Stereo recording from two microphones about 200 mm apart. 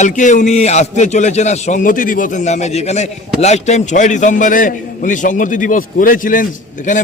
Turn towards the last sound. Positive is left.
turn(degrees=40)  # may be behind; listen again after turning